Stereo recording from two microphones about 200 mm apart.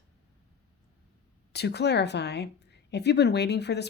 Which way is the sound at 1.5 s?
55° left (ahead or behind).